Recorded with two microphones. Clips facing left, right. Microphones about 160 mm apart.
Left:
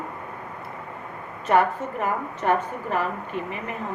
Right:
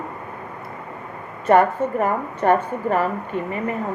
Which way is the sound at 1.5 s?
45° right (ahead or behind).